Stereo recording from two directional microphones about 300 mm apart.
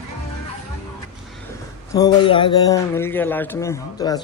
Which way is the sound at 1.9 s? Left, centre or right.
Centre.